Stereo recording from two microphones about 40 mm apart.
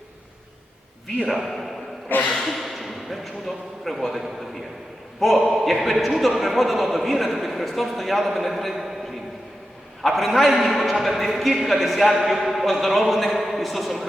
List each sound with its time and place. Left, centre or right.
1.2 s a man's voice: centre
2.0 s speech: left
2.3 s a man's voice: centre
10.0 s a man's voice: centre